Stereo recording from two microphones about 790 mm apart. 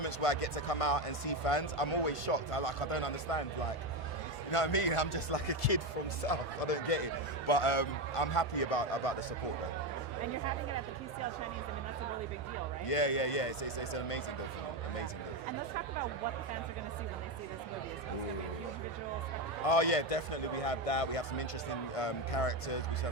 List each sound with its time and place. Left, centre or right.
0.0 s speech: left
4.5 s a man's voice: left
12.9 s speech: left
19.6 s a man's voice: left